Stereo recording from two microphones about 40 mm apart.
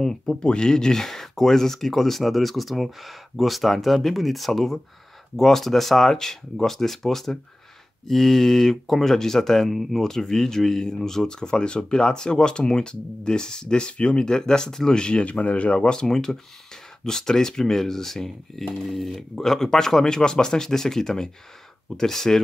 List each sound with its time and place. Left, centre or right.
0.0 s speech: centre
15.2 s speech: left; by 22.4 s centre